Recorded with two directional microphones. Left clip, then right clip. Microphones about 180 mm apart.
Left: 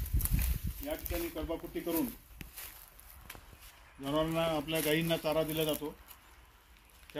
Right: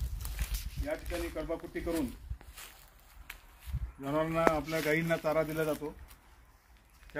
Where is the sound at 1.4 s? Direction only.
5° left (ahead or behind).